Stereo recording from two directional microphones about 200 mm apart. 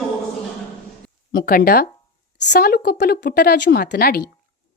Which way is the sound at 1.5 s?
45° left (ahead or behind).